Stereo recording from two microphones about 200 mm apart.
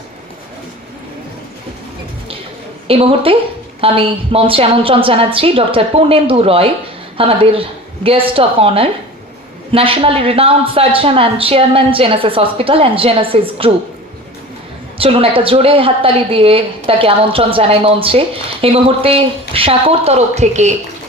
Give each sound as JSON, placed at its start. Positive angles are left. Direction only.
{"t": 2.8, "sound": "a woman's voice", "side_deg": -30}
{"t": 14.9, "sound": "a woman's voice", "side_deg": -25}